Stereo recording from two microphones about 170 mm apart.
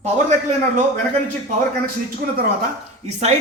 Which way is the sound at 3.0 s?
40° right (ahead or behind).